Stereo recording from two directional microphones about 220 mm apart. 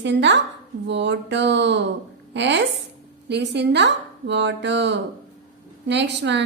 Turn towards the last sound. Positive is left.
turn(degrees=-50)  # may be behind; listen again after turning